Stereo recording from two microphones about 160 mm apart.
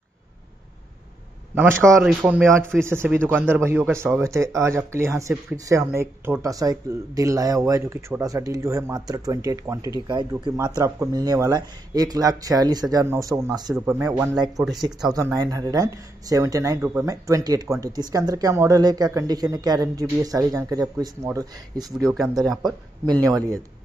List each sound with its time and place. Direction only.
1.5 s a man's voice: 15° right (ahead or behind)
1.9 s speech: centre (ahead or behind)
2.5 s speech: 15° right (ahead or behind)
14.9 s speech: 5° right (ahead or behind)
15.1 s speech: 20° right (ahead or behind)